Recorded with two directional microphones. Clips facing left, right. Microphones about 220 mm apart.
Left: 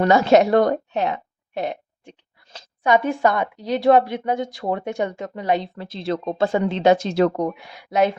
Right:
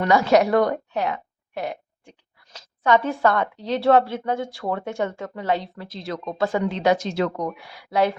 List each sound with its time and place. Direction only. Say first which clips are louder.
0.0 s a woman's voice: left 3 dB; 25° left (ahead or behind)
2.8 s a woman's voice: left 1 dB; 15° left (ahead or behind)